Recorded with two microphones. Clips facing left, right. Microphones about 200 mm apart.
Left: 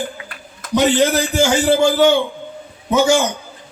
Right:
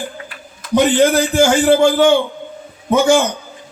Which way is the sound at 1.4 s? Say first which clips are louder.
Right 3 dB; 55° right (ahead or behind).